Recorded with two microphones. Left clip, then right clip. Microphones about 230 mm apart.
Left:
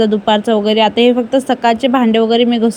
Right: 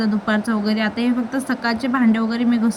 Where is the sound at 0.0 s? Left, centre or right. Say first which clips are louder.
Left 9 dB; centre.